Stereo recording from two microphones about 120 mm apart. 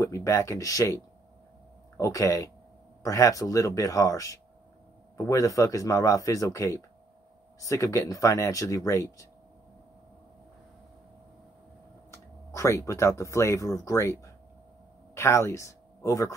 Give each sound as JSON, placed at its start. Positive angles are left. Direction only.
{"t": 0.0, "sound": "a man's voice", "side_deg": 25}
{"t": 12.1, "sound": "speech", "side_deg": 25}